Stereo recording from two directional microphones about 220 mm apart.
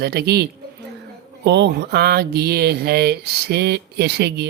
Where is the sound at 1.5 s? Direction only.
50° right (ahead or behind).